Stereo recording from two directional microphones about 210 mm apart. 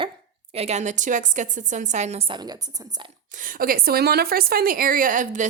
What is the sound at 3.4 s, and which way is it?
A woman's voice, 40° right (ahead or behind).